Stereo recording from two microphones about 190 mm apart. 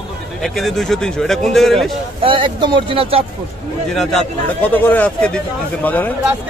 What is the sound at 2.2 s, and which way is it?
Speech, 25° right (ahead or behind).